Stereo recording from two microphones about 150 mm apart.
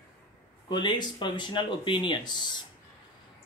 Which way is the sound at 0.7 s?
30° left (ahead or behind).